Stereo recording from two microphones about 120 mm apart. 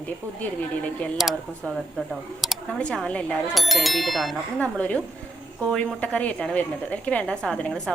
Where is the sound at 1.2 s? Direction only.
5° right (ahead or behind).